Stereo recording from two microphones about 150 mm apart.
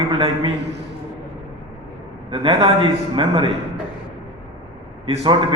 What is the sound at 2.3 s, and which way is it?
A man's voice, 40° right (ahead or behind).